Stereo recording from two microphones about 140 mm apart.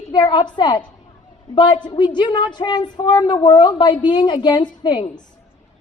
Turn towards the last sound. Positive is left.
turn(degrees=35)  # may be behind; listen again after turning